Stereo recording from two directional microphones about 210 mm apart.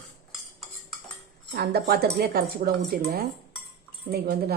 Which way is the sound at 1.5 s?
50° right (ahead or behind).